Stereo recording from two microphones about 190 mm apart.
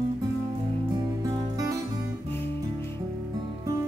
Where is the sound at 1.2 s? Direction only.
20° right (ahead or behind).